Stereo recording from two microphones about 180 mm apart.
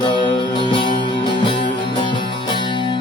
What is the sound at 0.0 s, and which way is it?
Music, 25° left (ahead or behind).